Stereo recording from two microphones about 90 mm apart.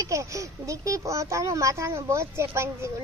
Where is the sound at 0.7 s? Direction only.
35° right (ahead or behind).